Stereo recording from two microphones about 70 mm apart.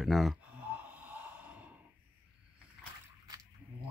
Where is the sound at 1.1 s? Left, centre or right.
Right.